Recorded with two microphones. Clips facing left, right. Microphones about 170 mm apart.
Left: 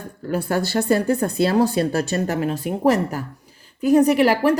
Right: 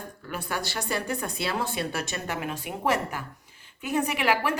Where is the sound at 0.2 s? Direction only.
40° left (ahead or behind).